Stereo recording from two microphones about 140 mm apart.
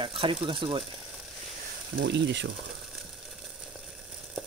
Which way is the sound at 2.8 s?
Centre (ahead or behind).